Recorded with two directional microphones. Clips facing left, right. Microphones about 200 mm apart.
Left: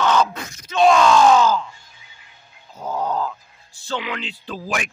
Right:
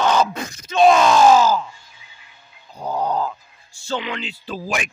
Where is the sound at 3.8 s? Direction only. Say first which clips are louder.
Right 1 dB; centre (ahead or behind).